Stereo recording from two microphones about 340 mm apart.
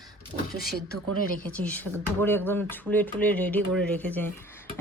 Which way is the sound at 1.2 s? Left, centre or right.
Left.